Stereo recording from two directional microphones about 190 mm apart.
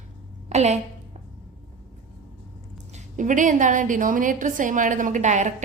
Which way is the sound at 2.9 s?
40° right (ahead or behind).